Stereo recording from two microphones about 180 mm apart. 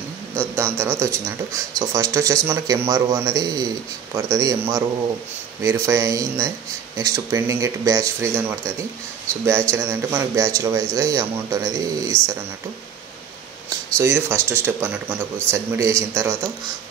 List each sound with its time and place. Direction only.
0.4 s speech: 15° right (ahead or behind)
13.9 s speech: 15° right (ahead or behind)